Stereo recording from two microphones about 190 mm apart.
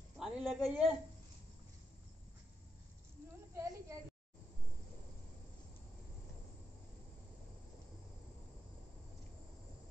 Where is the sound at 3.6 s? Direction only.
15° right (ahead or behind).